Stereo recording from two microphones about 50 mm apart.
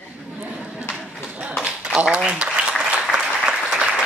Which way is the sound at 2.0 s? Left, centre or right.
Right.